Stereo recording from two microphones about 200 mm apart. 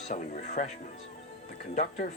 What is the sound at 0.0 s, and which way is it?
Speech, 40° left (ahead or behind).